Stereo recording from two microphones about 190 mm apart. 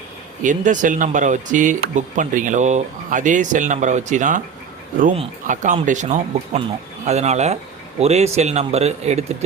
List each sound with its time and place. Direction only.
0.4 s speech: 40° right (ahead or behind)